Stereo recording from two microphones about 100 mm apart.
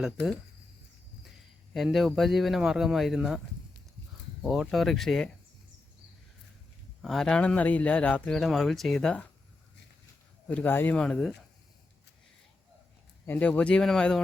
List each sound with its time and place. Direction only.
1.7 s speech: centre (ahead or behind)
4.4 s speech: 5° right (ahead or behind)
7.0 s speech: 5° left (ahead or behind)
8.3 s speech: centre (ahead or behind)
10.5 s speech: 20° left (ahead or behind)
10.9 s speech: 10° left (ahead or behind)
13.2 s speech: 15° left (ahead or behind)